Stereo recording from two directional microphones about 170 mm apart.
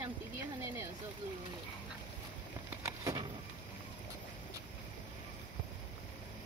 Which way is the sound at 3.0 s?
20° right (ahead or behind).